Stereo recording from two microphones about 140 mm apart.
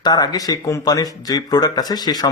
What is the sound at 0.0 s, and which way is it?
Speech, 30° left (ahead or behind).